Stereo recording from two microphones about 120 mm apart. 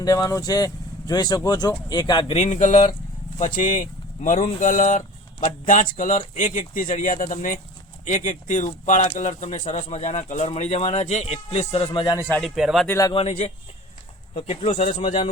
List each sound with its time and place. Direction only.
0.0 s speech: 30° left (ahead or behind)
2.3 s speech: 70° left (ahead or behind)
12.0 s speech: 30° left (ahead or behind)
12.4 s speech: 5° right (ahead or behind)
12.9 s speech: 25° left (ahead or behind)
13.1 s speech: 60° left (ahead or behind); by 15.0 s 75° left (ahead or behind)